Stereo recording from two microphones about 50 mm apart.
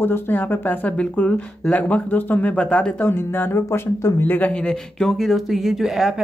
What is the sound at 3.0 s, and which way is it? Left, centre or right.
Speech, left.